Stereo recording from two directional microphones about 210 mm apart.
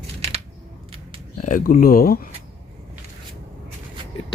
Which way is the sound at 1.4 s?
40° left (ahead or behind).